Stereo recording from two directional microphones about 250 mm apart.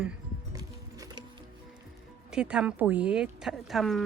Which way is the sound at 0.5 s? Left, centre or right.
Centre.